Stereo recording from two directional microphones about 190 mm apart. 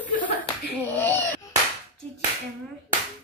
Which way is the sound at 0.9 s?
10° left (ahead or behind).